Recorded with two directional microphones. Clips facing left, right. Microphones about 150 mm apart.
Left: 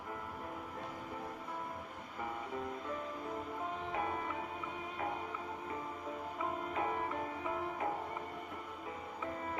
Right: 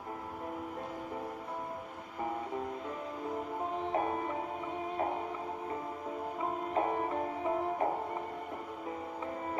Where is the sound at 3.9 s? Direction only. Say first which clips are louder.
Right 6 dB; 35° right (ahead or behind).